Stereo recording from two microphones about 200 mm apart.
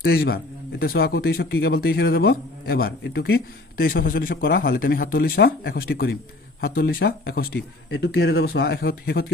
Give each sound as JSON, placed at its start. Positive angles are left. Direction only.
{"t": 0.0, "sound": "a man's voice", "side_deg": 50}
{"t": 7.9, "sound": "speech", "side_deg": 70}